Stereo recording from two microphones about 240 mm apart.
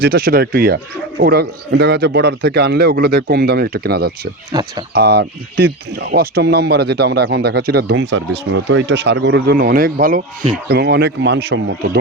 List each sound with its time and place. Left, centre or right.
0.0 s a man's voice: right
4.5 s speech: centre
4.9 s speech: right